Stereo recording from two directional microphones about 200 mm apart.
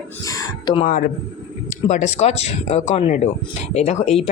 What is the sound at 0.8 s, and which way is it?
Speech, 45° left (ahead or behind).